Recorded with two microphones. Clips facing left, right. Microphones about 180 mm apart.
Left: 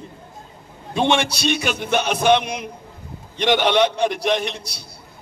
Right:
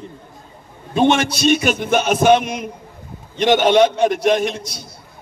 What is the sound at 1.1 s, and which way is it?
A man's voice, 45° right (ahead or behind).